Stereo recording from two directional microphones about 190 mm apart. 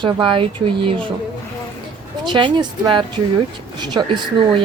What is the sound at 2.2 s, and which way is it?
A woman's voice, 25° right (ahead or behind).